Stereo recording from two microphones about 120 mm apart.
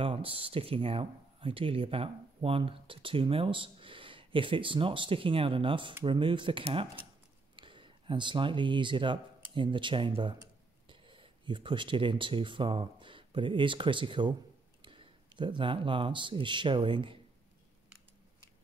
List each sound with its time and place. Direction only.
0.0 s speech: 50° right (ahead or behind)